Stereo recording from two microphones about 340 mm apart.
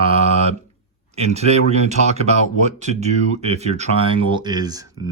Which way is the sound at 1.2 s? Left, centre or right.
Centre.